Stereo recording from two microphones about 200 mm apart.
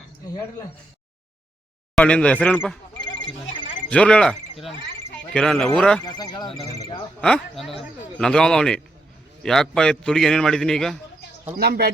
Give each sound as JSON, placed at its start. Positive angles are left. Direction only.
{"t": 2.0, "sound": "a man's voice", "side_deg": 5}
{"t": 3.8, "sound": "a man's voice", "side_deg": 5}
{"t": 6.1, "sound": "speech", "side_deg": 20}
{"t": 7.2, "sound": "a man's voice", "side_deg": 0}
{"t": 11.5, "sound": "speech", "side_deg": -50}